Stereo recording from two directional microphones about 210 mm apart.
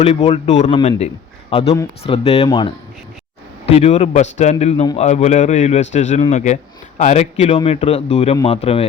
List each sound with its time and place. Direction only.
0.0 s speech: 30° left (ahead or behind)